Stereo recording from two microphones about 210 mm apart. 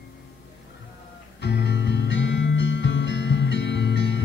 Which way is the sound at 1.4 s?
55° left (ahead or behind).